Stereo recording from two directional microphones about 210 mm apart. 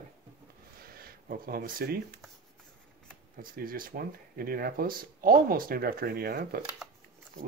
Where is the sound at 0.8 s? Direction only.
45° right (ahead or behind).